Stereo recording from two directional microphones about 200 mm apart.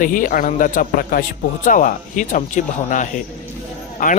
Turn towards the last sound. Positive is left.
turn(degrees=40)  # may be behind; listen again after turning